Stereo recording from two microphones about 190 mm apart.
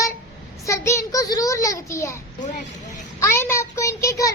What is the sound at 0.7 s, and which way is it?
A child's voice, 15° left (ahead or behind).